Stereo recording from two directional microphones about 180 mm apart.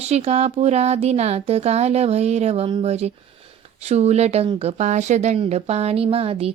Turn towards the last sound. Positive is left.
turn(degrees=-35)  # may be behind; listen again after turning